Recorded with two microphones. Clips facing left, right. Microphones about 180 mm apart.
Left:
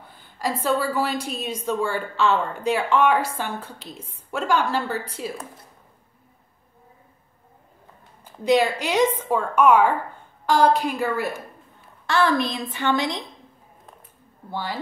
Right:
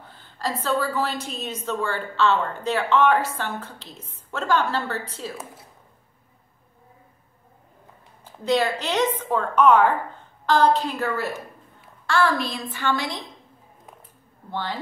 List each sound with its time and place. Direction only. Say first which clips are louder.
0.1 s a woman's voice: left 2 dB; 10° left (ahead or behind)
8.2 s a woman's voice: left 3 dB; 15° left (ahead or behind)